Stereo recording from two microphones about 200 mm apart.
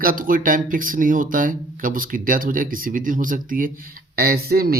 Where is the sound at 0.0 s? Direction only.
45° right (ahead or behind).